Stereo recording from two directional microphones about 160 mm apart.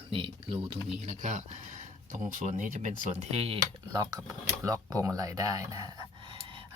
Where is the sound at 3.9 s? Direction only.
25° right (ahead or behind).